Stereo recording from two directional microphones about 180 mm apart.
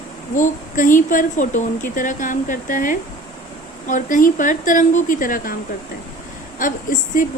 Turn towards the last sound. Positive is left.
turn(degrees=45)  # may be behind; listen again after turning